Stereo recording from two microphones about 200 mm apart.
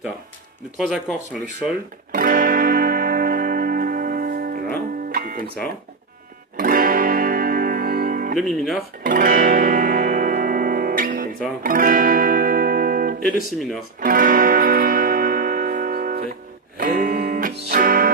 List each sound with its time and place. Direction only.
0.8 s speech: centre (ahead or behind)
2.1 s music: 45° right (ahead or behind)
6.6 s music: 45° right (ahead or behind)
8.4 s speech: centre (ahead or behind)
9.0 s music: 45° right (ahead or behind)
13.6 s speech: centre (ahead or behind)
14.0 s music: 45° right (ahead or behind)